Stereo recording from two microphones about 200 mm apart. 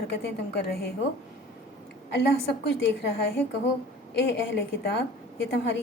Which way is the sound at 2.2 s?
60° left (ahead or behind).